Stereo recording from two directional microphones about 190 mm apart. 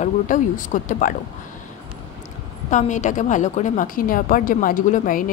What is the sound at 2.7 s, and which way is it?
A woman's voice, 40° left (ahead or behind).